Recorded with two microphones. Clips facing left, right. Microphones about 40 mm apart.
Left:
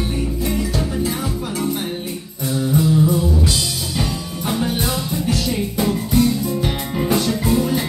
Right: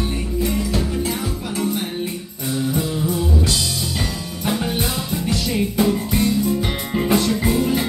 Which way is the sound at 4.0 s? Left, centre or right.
Centre.